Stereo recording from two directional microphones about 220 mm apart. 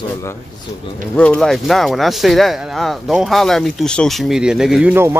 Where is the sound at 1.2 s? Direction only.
5° left (ahead or behind).